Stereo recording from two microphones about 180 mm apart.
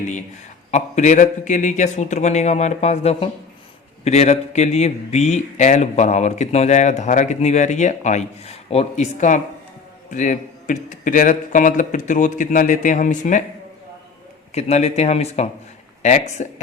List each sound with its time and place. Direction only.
0.7 s speech: 40° left (ahead or behind)
14.5 s speech: 35° left (ahead or behind)